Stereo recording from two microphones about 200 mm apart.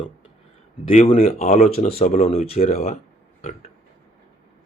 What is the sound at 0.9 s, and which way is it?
Speech, 30° left (ahead or behind).